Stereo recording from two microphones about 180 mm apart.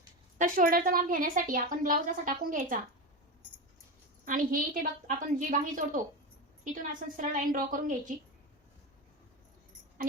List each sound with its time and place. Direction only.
0.3 s a woman's voice: 50° right (ahead or behind)
4.3 s a woman's voice: 50° right (ahead or behind)
7.2 s a woman's voice: 50° right (ahead or behind)